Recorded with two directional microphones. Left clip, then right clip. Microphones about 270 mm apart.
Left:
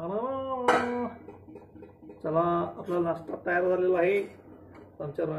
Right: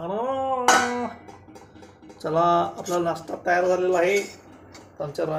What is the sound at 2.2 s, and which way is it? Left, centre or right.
Speech, right.